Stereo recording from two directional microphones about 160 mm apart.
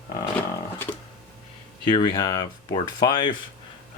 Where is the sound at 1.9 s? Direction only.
25° left (ahead or behind).